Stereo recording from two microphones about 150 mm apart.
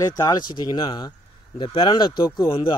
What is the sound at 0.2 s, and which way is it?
Speech, 30° left (ahead or behind).